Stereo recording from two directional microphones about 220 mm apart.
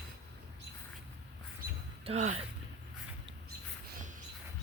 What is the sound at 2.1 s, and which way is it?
Speech, 30° right (ahead or behind).